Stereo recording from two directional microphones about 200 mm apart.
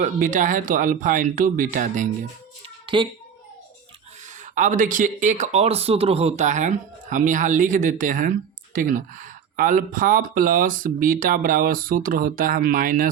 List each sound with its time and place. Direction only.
0.0 s speech: 40° right (ahead or behind)
2.8 s speech: 25° right (ahead or behind)
4.5 s speech: 40° right (ahead or behind)